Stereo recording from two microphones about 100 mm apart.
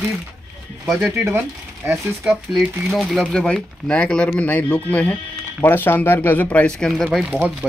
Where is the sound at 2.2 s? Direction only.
5° right (ahead or behind); by 6.9 s 15° left (ahead or behind).